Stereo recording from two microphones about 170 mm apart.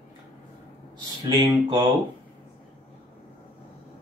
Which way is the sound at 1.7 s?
25° right (ahead or behind).